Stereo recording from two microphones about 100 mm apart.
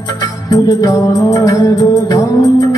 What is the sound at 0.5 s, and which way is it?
Music, 35° left (ahead or behind).